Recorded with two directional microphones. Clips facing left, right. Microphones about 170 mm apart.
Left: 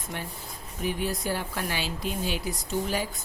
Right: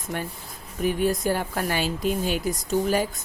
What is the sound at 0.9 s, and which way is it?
Speech, 50° right (ahead or behind).